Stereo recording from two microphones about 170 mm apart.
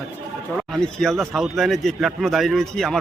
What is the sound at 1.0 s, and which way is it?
A man's voice, centre (ahead or behind).